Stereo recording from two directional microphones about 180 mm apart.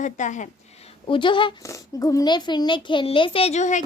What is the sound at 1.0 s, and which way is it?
A child's voice, 30° left (ahead or behind).